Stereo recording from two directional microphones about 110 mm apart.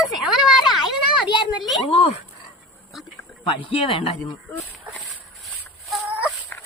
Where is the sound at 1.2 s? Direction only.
45° left (ahead or behind).